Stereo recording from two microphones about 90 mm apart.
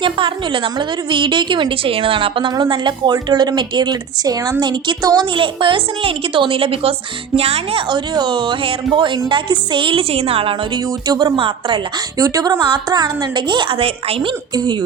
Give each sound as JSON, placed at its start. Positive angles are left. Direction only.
{"t": 0.0, "sound": "a woman's voice", "side_deg": -70}
{"t": 5.3, "sound": "a woman's voice", "side_deg": -70}
{"t": 7.9, "sound": "a woman's voice", "side_deg": -55}
{"t": 11.0, "sound": "speech", "side_deg": -50}
{"t": 11.3, "sound": "a woman's voice", "side_deg": -80}
{"t": 12.1, "sound": "speech", "side_deg": -40}
{"t": 12.6, "sound": "a woman's voice", "side_deg": -55}
{"t": 14.5, "sound": "speech", "side_deg": -55}